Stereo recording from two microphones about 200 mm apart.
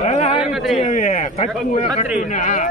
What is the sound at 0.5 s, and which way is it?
Speech, centre (ahead or behind).